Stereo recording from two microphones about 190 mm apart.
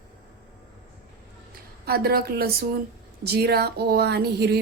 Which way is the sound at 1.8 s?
55° right (ahead or behind).